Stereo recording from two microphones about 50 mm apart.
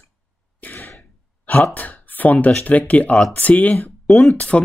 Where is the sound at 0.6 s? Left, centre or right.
Left.